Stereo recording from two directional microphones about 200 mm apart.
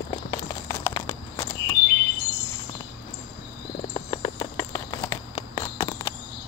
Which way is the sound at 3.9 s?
20° left (ahead or behind).